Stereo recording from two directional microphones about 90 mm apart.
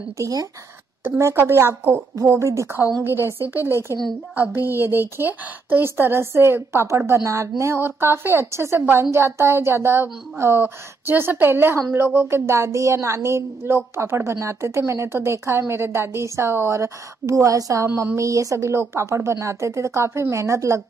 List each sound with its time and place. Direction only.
0.2 s speech: 45° right (ahead or behind)
1.0 s a woman's voice: 25° right (ahead or behind)